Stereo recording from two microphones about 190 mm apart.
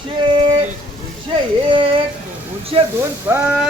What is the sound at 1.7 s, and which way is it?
Speech, 25° right (ahead or behind).